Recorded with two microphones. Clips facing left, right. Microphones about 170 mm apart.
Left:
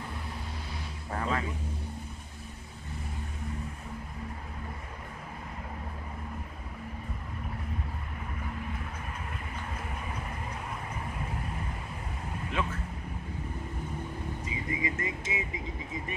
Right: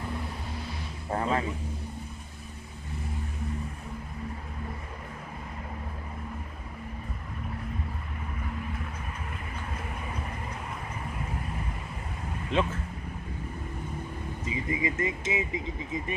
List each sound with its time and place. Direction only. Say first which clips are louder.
1.1 s a sound: right 4 dB; 30° right (ahead or behind)
12.5 s speech: right 6 dB; 25° right (ahead or behind)
14.4 s speech: right 5 dB; 20° right (ahead or behind)